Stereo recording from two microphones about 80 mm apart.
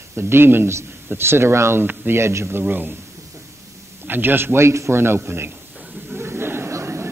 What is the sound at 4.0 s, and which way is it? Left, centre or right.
A man's voice, right.